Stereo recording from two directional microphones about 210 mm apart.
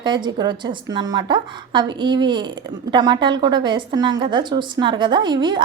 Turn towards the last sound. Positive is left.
turn(degrees=-20)  # may be behind; listen again after turning